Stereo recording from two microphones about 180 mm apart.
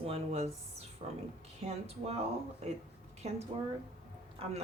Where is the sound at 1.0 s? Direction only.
30° right (ahead or behind).